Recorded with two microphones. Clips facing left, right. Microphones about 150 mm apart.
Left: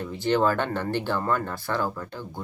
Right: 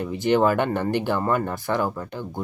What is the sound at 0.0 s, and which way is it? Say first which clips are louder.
Speech: right 3 dB; 15° right (ahead or behind).